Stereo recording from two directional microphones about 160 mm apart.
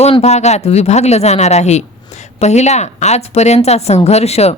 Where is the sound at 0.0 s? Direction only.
40° left (ahead or behind).